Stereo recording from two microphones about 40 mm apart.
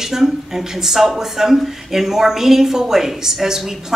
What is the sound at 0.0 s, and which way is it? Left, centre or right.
Speech, centre.